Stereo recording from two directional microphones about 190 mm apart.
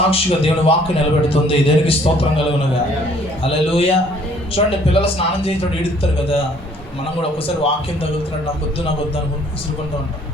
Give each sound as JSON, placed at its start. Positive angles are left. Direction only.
{"t": 0.1, "sound": "a man's voice", "side_deg": 30}
{"t": 3.4, "sound": "a man's voice", "side_deg": 30}